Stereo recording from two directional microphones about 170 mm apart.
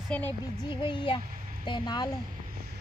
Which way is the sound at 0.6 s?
30° left (ahead or behind).